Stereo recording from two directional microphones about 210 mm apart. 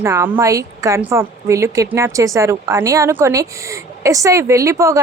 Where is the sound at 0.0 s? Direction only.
15° right (ahead or behind).